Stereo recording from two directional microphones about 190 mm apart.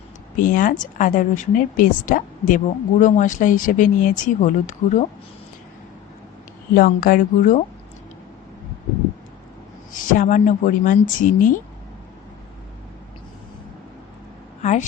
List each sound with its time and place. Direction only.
0.3 s speech: 45° left (ahead or behind)
6.7 s speech: 50° left (ahead or behind)
9.9 s speech: 45° left (ahead or behind)
14.6 s vehicle: 40° left (ahead or behind)